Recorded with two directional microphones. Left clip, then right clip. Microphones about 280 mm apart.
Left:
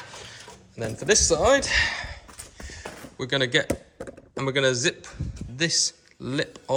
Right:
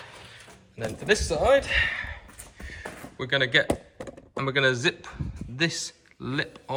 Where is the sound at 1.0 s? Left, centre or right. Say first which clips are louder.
Left 4 dB; left.